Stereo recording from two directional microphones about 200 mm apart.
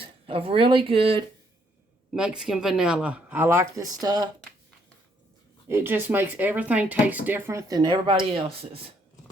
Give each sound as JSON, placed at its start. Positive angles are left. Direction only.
{"t": 0.0, "sound": "speech", "side_deg": -25}
{"t": 2.1, "sound": "speech", "side_deg": -5}
{"t": 5.6, "sound": "speech", "side_deg": -10}